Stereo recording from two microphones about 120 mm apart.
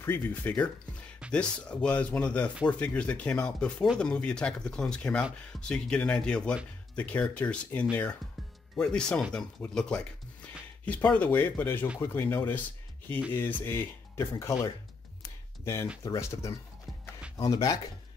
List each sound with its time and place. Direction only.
0.0 s speech: 15° left (ahead or behind)
15.6 s speech: 25° left (ahead or behind)